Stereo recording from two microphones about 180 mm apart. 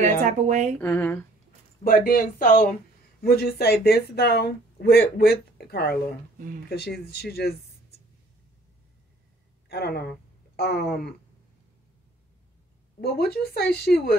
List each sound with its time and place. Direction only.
0.0 s speech: 40° right (ahead or behind)
0.7 s speech: 10° left (ahead or behind)
1.8 s speech: 55° left (ahead or behind)
9.7 s speech: 60° left (ahead or behind)
13.0 s speech: 60° left (ahead or behind)